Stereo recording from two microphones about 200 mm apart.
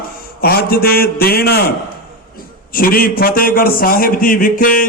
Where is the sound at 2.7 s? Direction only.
45° left (ahead or behind).